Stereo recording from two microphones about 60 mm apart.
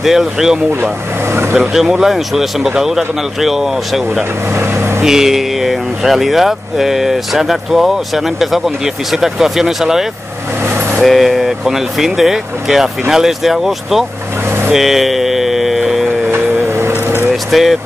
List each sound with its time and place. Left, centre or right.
0.0 s speech: centre
1.3 s vehicle: right
1.6 s speech: centre
4.6 s speech: right
5.0 s speech: centre
14.7 s music: centre
16.3 s a sound: right
17.3 s vehicle: centre